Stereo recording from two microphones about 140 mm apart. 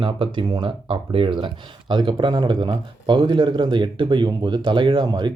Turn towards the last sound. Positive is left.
turn(degrees=-30)  # may be behind; listen again after turning